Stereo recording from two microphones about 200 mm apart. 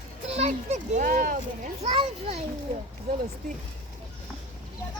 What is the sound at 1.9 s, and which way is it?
Speech, 30° right (ahead or behind).